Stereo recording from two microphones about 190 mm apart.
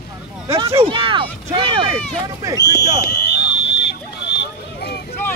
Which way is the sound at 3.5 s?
60° left (ahead or behind).